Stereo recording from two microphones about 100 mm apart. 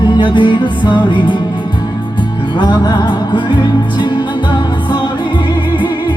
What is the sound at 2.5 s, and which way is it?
Music, 50° left (ahead or behind).